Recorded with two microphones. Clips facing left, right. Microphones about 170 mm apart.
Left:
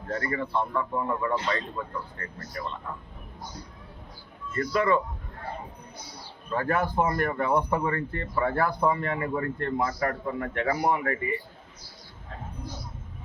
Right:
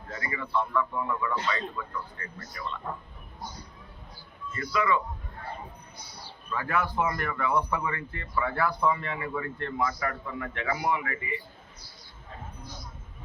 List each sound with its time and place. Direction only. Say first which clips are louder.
0.1 s a man's voice: left 3 dB; 50° left (ahead or behind)
4.5 s speech: left 3 dB; 45° left (ahead or behind)
6.5 s speech: left 3 dB; 50° left (ahead or behind)